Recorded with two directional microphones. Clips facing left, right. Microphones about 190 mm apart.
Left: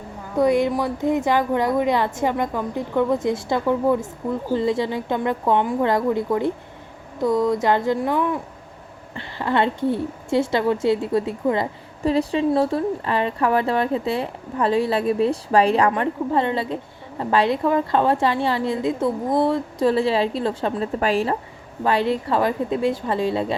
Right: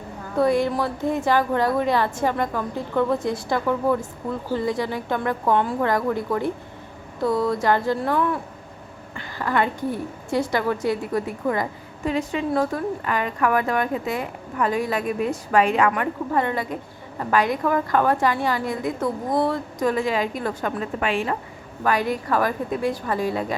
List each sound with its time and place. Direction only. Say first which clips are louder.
0.3 s a woman's voice: left 2 dB; 20° left (ahead or behind); by 21.3 s 35° left (ahead or behind)
21.8 s a woman's voice: left 2 dB; 25° left (ahead or behind)